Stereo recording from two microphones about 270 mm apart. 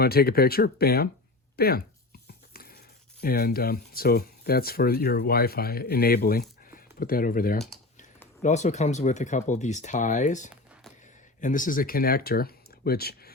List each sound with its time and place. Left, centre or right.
0.0 s speech: left
2.5 s a sound: left
3.2 s speech: left